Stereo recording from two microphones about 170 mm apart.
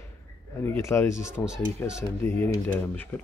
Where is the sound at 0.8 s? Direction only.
15° left (ahead or behind).